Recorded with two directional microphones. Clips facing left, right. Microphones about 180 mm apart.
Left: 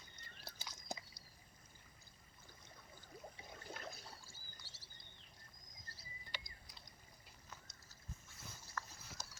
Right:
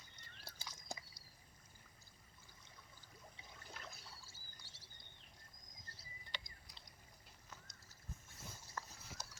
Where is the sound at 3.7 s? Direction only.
50° left (ahead or behind).